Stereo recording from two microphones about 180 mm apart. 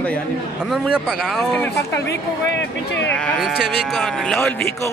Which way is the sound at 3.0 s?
5° left (ahead or behind).